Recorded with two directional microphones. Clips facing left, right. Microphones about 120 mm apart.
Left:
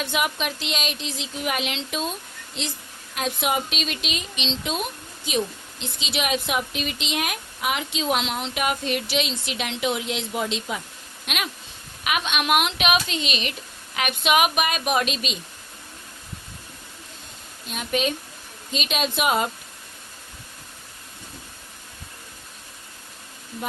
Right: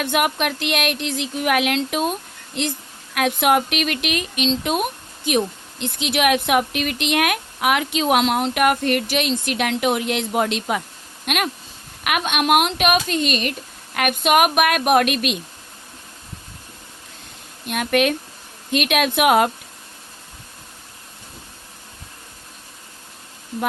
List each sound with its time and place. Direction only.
0.0 s speech: 55° right (ahead or behind)
11.3 s speech: 50° right (ahead or behind)
17.7 s speech: 65° right (ahead or behind)